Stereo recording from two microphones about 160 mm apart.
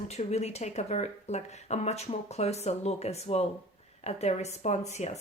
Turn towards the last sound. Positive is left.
turn(degrees=45)  # may be behind; listen again after turning